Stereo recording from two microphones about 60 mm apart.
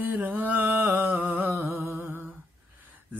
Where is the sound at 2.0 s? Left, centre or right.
Right.